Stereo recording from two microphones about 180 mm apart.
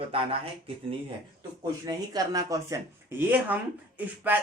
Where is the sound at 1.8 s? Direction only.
20° right (ahead or behind).